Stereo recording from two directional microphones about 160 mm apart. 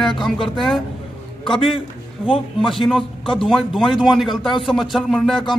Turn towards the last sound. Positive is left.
turn(degrees=0)  # may be behind; listen again after turning